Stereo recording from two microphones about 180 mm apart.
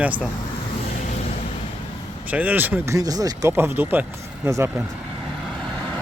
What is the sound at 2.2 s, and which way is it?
Speech, 10° right (ahead or behind).